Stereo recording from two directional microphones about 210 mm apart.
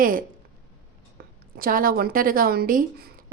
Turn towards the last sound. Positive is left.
turn(degrees=-45)  # may be behind; listen again after turning